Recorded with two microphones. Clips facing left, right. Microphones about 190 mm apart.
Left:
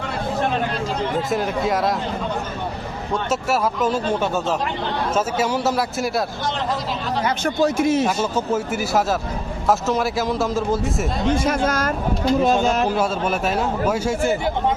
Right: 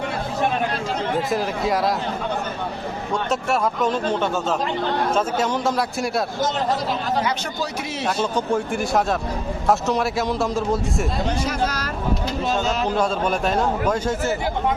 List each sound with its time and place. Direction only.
1.3 s speech: centre (ahead or behind)
3.1 s speech: 5° left (ahead or behind)
7.3 s a man's voice: 50° left (ahead or behind)
8.0 s speech: 5° left (ahead or behind)
11.3 s a man's voice: 50° left (ahead or behind)
13.0 s a man's voice: 5° left (ahead or behind)